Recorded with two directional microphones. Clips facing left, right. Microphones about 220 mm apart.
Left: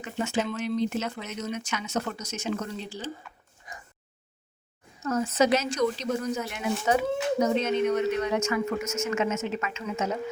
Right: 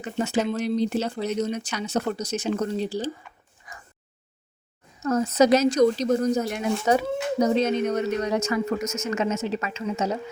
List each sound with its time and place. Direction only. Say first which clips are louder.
0.0 s speech: right 4 dB; 35° right (ahead or behind)
3.7 s a sound: left 1 dB; 20° left (ahead or behind)
5.0 s speech: right 5 dB; 40° right (ahead or behind)